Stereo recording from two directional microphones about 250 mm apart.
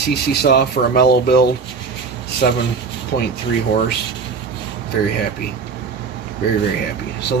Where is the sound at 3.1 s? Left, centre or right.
Left.